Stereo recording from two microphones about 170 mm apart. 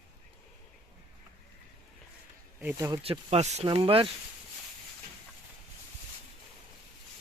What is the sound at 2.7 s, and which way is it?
Speech, 20° right (ahead or behind).